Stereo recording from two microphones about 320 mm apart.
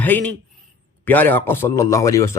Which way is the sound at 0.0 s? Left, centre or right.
Centre.